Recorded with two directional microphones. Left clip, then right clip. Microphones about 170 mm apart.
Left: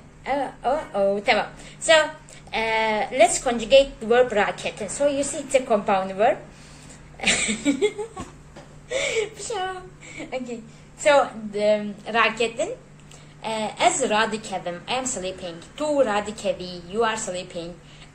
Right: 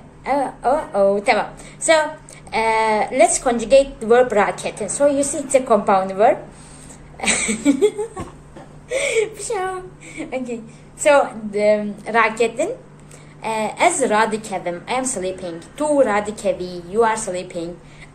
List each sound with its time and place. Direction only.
0.2 s a woman's voice: 5° left (ahead or behind)
7.2 s a sound: 5° left (ahead or behind)
8.8 s a woman's voice: centre (ahead or behind)